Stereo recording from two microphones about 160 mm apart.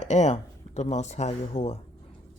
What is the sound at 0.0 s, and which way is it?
Speech, 45° left (ahead or behind).